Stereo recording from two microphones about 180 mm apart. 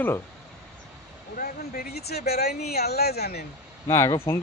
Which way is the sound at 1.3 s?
55° left (ahead or behind).